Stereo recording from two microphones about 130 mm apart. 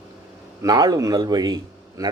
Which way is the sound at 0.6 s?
30° right (ahead or behind).